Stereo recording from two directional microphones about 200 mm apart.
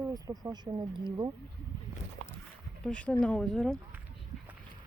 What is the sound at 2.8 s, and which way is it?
Speech, 5° left (ahead or behind).